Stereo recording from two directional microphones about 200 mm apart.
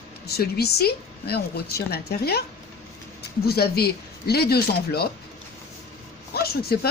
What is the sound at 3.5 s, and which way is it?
A woman's voice, 50° left (ahead or behind).